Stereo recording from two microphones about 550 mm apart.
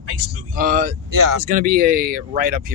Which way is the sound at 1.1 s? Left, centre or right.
Right.